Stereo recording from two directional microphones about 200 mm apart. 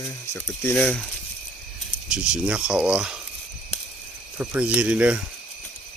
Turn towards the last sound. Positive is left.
turn(degrees=-5)  # may be behind; listen again after turning